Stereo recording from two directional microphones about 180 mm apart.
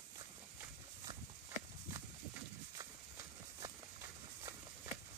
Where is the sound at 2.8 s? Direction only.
20° right (ahead or behind).